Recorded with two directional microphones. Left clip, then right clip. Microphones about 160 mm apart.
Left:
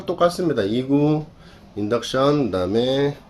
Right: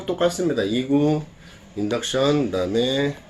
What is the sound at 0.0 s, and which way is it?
Speech, 25° left (ahead or behind).